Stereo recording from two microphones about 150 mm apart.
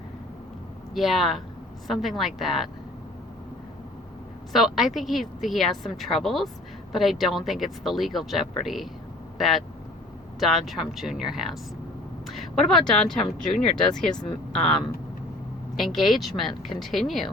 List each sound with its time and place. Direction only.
0.9 s a woman's voice: centre (ahead or behind)
4.5 s a woman's voice: centre (ahead or behind)
14.2 s speech: 35° left (ahead or behind)
15.7 s a woman's voice: centre (ahead or behind)